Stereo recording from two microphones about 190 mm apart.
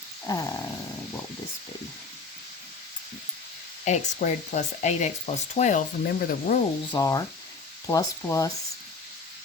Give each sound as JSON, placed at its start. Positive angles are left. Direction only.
{"t": 0.3, "sound": "speech", "side_deg": 20}
{"t": 3.8, "sound": "speech", "side_deg": 40}
{"t": 6.1, "sound": "sizzle", "side_deg": 45}
{"t": 6.9, "sound": "speech", "side_deg": 20}